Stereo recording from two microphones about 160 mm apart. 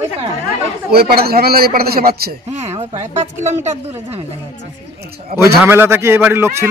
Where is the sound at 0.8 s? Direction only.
75° right (ahead or behind).